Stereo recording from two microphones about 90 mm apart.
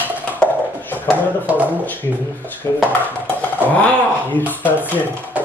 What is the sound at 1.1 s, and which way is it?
Speech, 20° right (ahead or behind).